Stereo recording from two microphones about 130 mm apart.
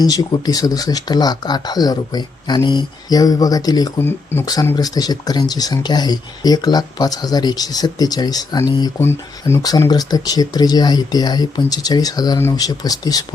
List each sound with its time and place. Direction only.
0.0 s speech: 30° left (ahead or behind)
4.0 s speech: 15° left (ahead or behind)
4.6 s speech: 30° left (ahead or behind)
9.0 s speech: 20° left (ahead or behind)
9.6 s speech: 30° left (ahead or behind)